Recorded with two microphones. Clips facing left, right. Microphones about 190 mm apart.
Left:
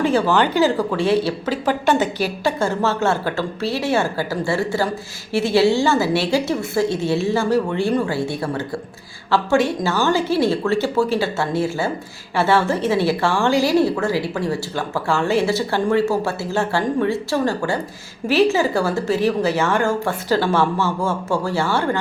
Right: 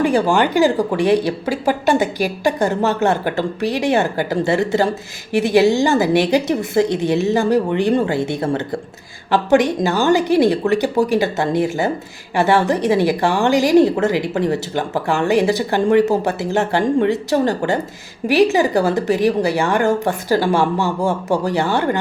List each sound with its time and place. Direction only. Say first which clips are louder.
0.0 s a woman's voice: right 2 dB; 15° right (ahead or behind)